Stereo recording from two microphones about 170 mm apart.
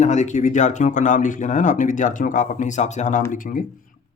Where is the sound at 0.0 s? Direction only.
45° left (ahead or behind).